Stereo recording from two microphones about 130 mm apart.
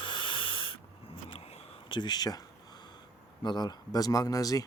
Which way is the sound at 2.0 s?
30° left (ahead or behind).